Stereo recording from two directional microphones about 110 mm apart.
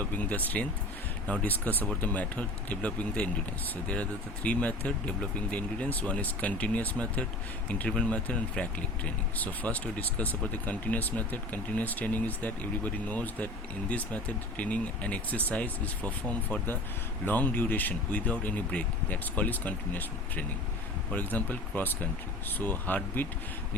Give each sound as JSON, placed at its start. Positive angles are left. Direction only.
{"t": 0.0, "sound": "speech", "side_deg": 15}
{"t": 4.4, "sound": "speech", "side_deg": 10}